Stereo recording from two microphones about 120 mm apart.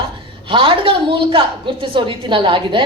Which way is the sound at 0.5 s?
45° right (ahead or behind).